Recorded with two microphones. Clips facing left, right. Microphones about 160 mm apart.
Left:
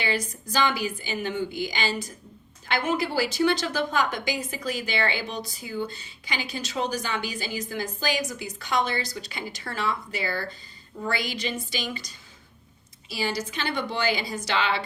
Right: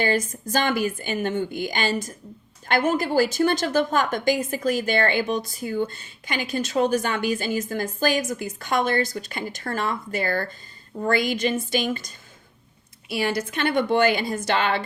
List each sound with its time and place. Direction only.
0.0 s a woman's voice: 45° right (ahead or behind)